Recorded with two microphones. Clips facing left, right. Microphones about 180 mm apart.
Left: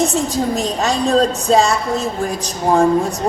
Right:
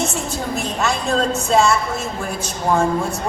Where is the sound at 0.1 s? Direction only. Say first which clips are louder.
Left 6 dB; 35° left (ahead or behind).